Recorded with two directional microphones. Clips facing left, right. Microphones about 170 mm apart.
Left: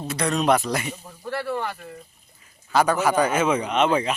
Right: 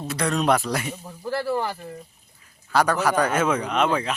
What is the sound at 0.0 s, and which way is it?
Speech, centre (ahead or behind).